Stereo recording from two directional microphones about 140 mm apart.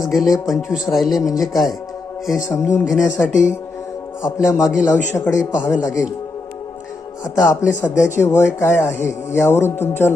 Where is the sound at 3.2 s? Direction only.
10° left (ahead or behind).